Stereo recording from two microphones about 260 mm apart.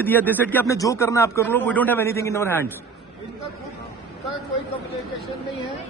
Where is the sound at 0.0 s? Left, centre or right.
Centre.